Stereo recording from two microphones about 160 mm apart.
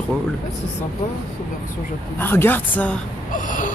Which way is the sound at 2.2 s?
15° left (ahead or behind).